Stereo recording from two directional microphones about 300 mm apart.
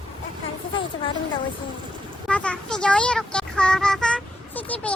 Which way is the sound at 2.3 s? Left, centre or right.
Centre.